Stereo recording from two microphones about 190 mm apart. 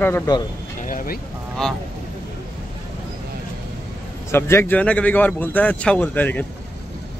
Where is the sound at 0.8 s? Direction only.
45° left (ahead or behind).